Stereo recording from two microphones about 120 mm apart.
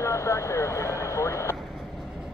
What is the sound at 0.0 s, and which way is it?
Vehicle, 25° left (ahead or behind).